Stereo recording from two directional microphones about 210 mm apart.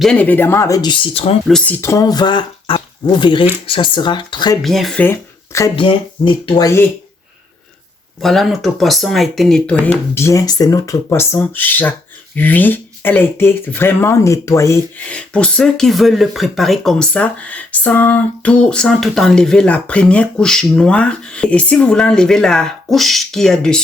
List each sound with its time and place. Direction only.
0.0 s speech: 5° left (ahead or behind); by 1.4 s 25° left (ahead or behind)
1.5 s speech: 5° left (ahead or behind); by 4.5 s 20° left (ahead or behind)
4.6 s speech: centre (ahead or behind)
5.7 s speech: 25° left (ahead or behind)
8.2 s speech: centre (ahead or behind)